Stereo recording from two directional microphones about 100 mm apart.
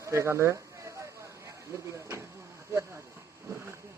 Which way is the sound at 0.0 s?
30° right (ahead or behind).